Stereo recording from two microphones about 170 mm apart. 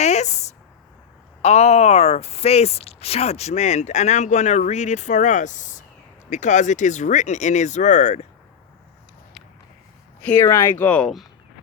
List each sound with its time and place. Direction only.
0.0 s a sound: 40° left (ahead or behind)
1.4 s speech: 40° left (ahead or behind)
10.2 s speech: 10° left (ahead or behind)